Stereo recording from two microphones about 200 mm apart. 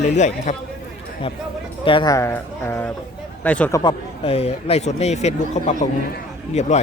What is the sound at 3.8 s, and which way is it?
Speech, 25° left (ahead or behind).